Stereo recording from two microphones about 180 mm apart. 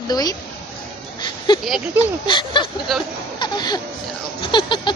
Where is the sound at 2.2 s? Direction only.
25° left (ahead or behind).